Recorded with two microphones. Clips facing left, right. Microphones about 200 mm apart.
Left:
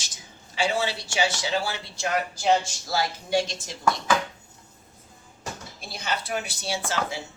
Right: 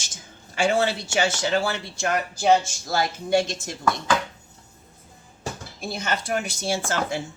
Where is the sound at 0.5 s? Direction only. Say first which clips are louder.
Right 4 dB; 50° right (ahead or behind).